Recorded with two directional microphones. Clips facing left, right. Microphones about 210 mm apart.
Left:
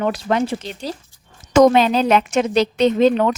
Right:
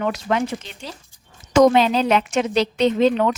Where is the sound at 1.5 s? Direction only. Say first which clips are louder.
Left 2 dB; 45° left (ahead or behind).